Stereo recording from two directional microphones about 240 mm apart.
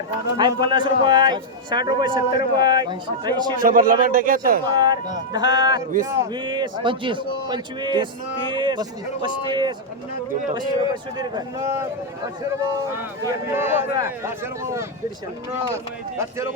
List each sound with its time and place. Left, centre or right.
0.3 s a man's voice: centre
3.6 s speech: right
4.6 s a man's voice: centre